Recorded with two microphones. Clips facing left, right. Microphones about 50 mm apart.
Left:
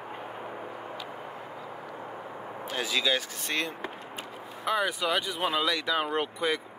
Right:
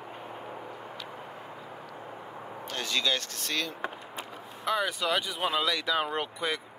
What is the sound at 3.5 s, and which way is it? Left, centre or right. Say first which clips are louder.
Speech: left 2 dB; left.